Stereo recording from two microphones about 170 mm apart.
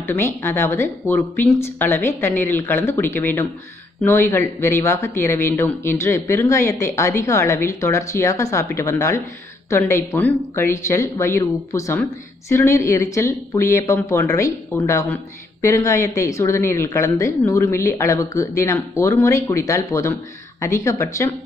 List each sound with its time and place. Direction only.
0.0 s speech: 15° left (ahead or behind)